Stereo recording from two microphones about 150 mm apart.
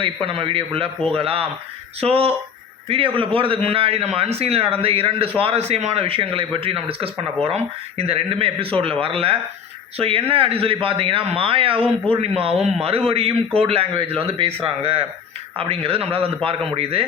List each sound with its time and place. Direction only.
0.0 s a man's voice: 35° right (ahead or behind)